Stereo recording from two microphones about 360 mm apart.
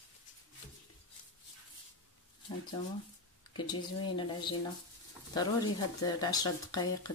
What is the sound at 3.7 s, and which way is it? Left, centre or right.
Speech, centre.